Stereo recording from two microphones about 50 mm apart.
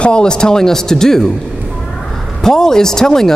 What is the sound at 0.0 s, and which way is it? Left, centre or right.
A man's voice, centre.